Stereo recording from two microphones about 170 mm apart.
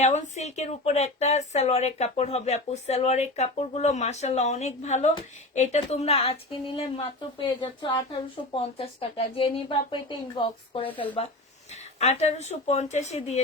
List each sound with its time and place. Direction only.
0.0 s speech: 40° left (ahead or behind)